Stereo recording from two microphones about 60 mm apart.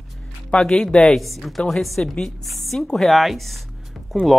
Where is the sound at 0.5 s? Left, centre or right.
Centre.